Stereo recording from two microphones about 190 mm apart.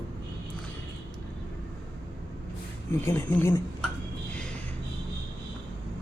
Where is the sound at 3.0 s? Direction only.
15° left (ahead or behind).